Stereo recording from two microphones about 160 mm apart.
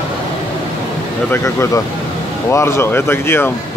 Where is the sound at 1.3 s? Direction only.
20° left (ahead or behind).